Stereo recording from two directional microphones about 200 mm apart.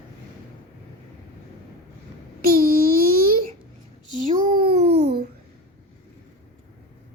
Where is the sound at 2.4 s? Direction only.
45° right (ahead or behind).